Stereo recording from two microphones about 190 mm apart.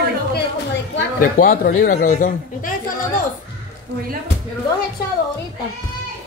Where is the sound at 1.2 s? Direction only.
50° left (ahead or behind).